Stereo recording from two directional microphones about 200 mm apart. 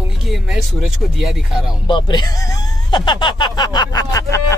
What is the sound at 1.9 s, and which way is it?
Speech, 20° left (ahead or behind).